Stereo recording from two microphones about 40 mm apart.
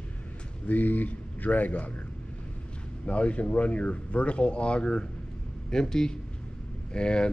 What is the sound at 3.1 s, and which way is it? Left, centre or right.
Speech, left.